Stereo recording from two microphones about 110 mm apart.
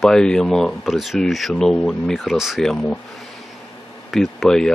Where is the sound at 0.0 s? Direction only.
5° left (ahead or behind).